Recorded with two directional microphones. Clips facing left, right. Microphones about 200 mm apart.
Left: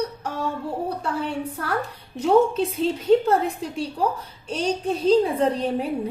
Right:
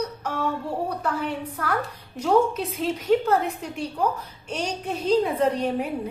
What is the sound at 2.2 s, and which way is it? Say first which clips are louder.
A woman's voice: left 3 dB; 30° left (ahead or behind).